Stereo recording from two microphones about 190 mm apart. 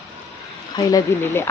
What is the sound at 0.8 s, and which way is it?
Speech, 15° left (ahead or behind).